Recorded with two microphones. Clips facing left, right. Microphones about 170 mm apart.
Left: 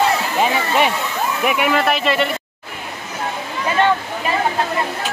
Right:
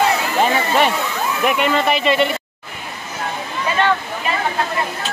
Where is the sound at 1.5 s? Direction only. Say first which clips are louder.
Even; 5° left (ahead or behind).